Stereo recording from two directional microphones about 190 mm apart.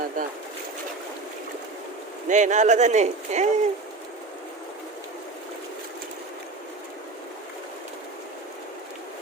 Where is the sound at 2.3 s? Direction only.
40° right (ahead or behind).